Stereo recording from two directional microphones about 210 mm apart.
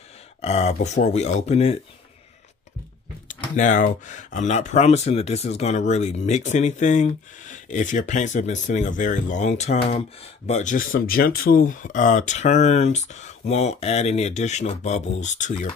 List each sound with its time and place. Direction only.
0.4 s speech: 30° left (ahead or behind)
3.3 s speech: 35° left (ahead or behind)